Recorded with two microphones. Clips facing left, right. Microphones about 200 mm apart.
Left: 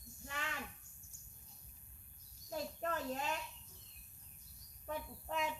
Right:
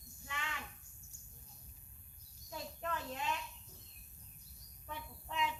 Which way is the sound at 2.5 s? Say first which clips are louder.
Left 3 dB; 40° left (ahead or behind).